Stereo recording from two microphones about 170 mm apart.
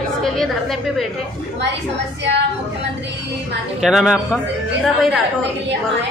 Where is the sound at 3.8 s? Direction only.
Centre (ahead or behind).